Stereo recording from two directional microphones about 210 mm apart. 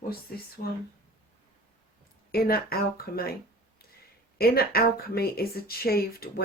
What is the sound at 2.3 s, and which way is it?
Speech, 45° left (ahead or behind).